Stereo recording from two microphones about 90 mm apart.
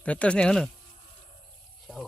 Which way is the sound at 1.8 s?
Centre (ahead or behind).